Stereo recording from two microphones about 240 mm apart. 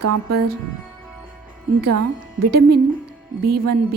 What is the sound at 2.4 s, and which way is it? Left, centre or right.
Speech, right.